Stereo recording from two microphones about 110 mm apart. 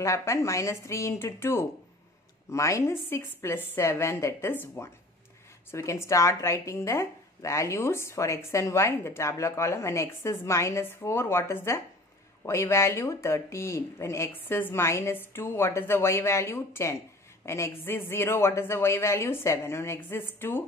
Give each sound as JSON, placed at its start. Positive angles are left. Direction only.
{"t": 0.0, "sound": "speech", "side_deg": 25}